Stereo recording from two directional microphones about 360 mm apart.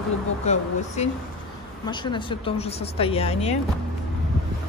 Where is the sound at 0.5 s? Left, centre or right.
Centre.